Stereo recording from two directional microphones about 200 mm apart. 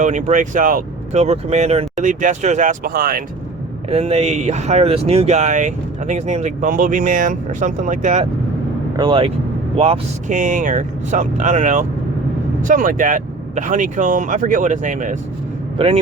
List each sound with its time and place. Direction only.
0.0 s speech: 35° right (ahead or behind)
3.8 s speech: 30° right (ahead or behind)
9.0 s speech: 25° right (ahead or behind); by 15.2 s 40° right (ahead or behind)